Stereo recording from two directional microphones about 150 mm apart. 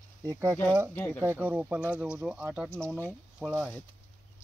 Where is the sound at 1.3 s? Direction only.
15° right (ahead or behind).